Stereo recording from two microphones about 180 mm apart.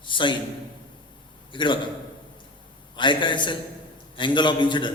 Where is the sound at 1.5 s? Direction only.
25° left (ahead or behind).